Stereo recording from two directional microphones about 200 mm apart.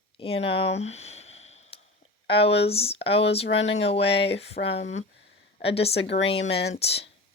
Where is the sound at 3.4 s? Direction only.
65° left (ahead or behind).